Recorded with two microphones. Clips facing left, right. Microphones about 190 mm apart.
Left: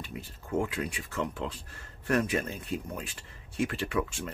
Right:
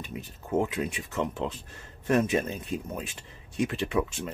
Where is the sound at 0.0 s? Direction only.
20° right (ahead or behind).